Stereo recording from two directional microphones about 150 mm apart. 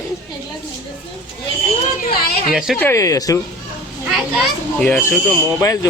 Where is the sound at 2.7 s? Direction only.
15° left (ahead or behind).